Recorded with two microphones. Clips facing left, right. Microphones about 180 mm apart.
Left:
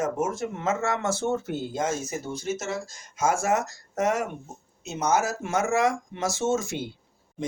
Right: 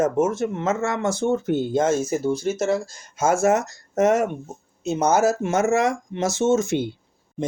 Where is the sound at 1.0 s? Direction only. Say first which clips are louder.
Right 5 dB; 15° right (ahead or behind).